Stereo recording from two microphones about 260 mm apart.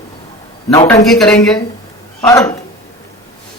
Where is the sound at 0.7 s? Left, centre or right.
Centre.